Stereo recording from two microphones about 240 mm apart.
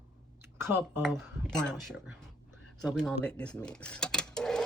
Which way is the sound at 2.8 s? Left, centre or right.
Centre.